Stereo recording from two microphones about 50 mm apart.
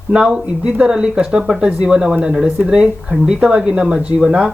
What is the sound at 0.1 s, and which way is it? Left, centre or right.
Speech, centre.